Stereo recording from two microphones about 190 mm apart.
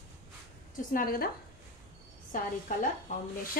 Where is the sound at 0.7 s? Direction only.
50° left (ahead or behind).